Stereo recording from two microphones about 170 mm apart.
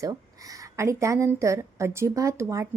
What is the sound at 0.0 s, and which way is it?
A woman's voice, 20° right (ahead or behind).